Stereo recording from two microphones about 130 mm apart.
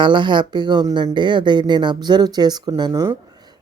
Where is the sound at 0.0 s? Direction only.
35° right (ahead or behind).